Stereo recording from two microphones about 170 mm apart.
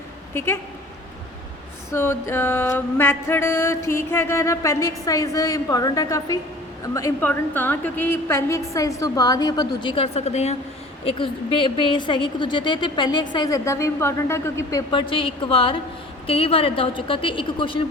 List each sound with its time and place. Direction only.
0.3 s mantra: 15° left (ahead or behind)
1.9 s mantra: 15° left (ahead or behind)
6.8 s a woman's voice: 20° left (ahead or behind)